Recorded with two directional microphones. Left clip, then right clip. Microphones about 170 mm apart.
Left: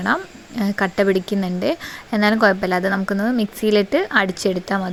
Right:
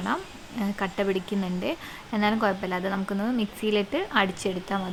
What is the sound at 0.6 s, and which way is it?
A woman's voice, 35° left (ahead or behind).